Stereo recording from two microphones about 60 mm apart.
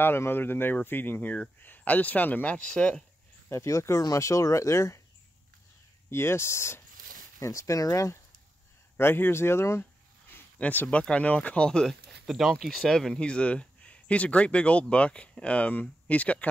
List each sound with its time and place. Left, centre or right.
0.0 s speech: left; by 3.0 s centre
3.4 s speech: left
6.0 s speech: left
7.3 s speech: left
8.9 s speech: left
10.6 s speech: left; by 13.2 s centre
13.2 s speech: centre